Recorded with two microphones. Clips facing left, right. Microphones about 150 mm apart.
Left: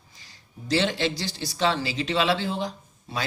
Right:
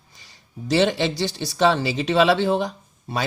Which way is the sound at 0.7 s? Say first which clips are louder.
Right 5 dB; 60° right (ahead or behind).